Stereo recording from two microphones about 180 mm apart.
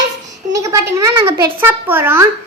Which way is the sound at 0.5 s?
15° right (ahead or behind).